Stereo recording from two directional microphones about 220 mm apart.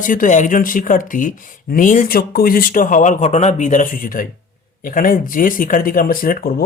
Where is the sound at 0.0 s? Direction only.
35° left (ahead or behind).